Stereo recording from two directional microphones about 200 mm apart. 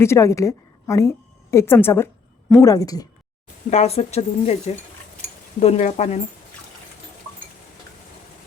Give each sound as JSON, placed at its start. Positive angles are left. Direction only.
{"t": 0.0, "sound": "a woman's voice", "side_deg": 15}
{"t": 3.7, "sound": "speech", "side_deg": 30}